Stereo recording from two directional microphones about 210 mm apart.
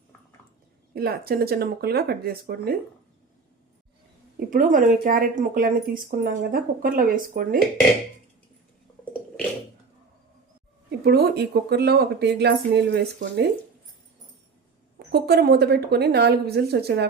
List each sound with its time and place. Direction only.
0.9 s speech: 50° right (ahead or behind)
4.4 s speech: 40° right (ahead or behind)
10.8 s speech: 50° right (ahead or behind)
14.9 s speech: 50° right (ahead or behind)